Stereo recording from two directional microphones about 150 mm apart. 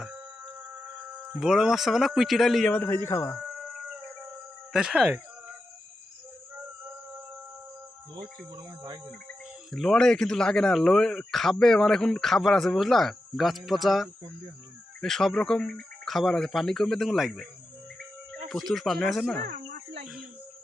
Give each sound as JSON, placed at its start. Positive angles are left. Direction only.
{"t": 1.2, "sound": "speech", "side_deg": -5}
{"t": 2.7, "sound": "a man's voice", "side_deg": 15}
{"t": 4.7, "sound": "speech", "side_deg": -5}
{"t": 8.5, "sound": "speech", "side_deg": -30}
{"t": 9.7, "sound": "speech", "side_deg": 5}
{"t": 19.5, "sound": "cricket", "side_deg": -90}